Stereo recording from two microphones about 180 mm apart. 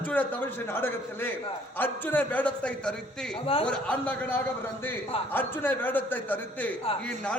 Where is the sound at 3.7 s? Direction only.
10° left (ahead or behind).